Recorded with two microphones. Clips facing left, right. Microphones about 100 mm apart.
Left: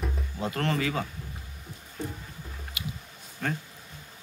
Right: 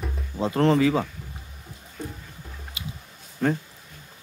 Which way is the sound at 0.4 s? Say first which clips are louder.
Right 9 dB; 30° right (ahead or behind).